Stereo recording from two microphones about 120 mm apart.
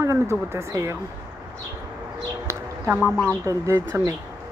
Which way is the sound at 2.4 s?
20° right (ahead or behind).